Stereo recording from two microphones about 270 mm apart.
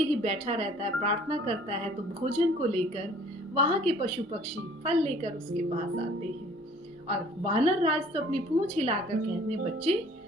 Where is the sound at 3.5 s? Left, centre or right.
Right.